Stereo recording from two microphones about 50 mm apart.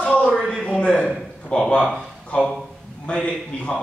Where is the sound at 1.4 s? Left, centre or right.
Centre.